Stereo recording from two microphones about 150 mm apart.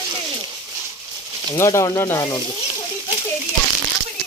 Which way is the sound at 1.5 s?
20° left (ahead or behind).